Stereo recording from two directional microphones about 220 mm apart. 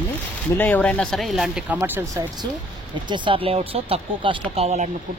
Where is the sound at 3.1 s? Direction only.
20° right (ahead or behind).